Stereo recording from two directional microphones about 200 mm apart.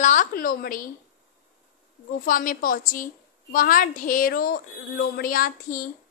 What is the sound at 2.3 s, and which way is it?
A woman's voice, 45° left (ahead or behind).